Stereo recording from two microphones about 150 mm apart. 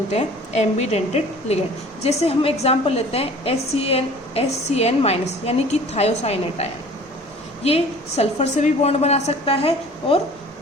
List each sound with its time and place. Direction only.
0.1 s a woman's voice: 45° left (ahead or behind)